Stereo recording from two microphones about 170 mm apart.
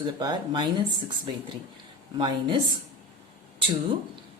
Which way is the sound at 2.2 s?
30° right (ahead or behind).